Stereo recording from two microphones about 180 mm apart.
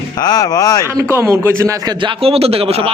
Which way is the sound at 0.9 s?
15° right (ahead or behind).